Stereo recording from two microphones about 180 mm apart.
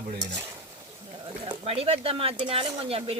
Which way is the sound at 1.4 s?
30° right (ahead or behind).